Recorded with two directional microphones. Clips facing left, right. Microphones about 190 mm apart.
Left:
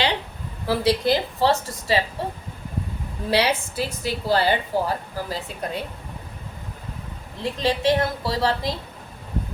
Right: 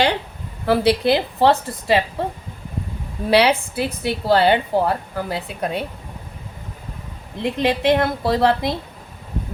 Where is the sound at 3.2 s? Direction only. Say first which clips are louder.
Right 5 dB; 65° right (ahead or behind).